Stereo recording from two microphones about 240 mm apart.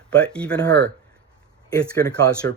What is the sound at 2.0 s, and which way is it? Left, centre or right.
Speech, centre.